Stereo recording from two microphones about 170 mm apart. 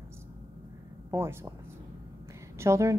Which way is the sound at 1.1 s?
15° right (ahead or behind).